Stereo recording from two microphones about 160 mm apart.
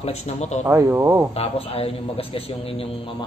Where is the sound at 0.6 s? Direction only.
15° right (ahead or behind).